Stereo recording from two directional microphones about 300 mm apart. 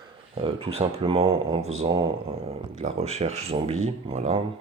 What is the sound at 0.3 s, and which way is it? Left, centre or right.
Speech, centre.